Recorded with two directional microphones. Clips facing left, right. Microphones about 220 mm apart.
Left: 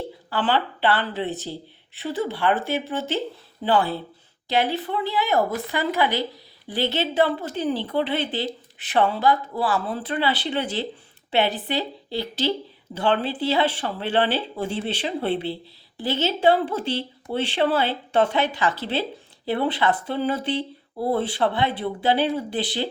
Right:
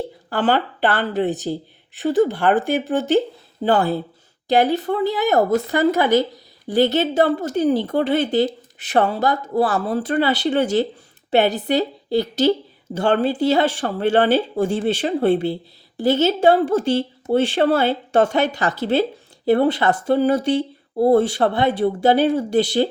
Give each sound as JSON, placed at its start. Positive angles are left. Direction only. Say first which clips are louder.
{"t": 0.3, "sound": "a woman's voice", "louder": "right 4 dB", "side_deg": -45}